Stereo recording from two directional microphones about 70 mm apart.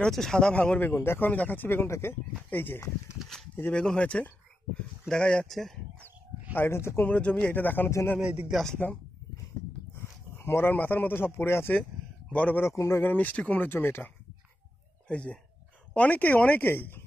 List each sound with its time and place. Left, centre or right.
0.0 s speech: centre
0.7 s speech: left
3.7 s speech: centre
5.5 s speech: centre
5.9 s a sound: right
6.5 s speech: left
7.1 s speech: centre
8.2 s speech: centre
8.8 s speech: left
12.3 s speech: left
12.6 s speech: left
13.0 s speech: left
13.7 s speech: left
15.0 s speech: centre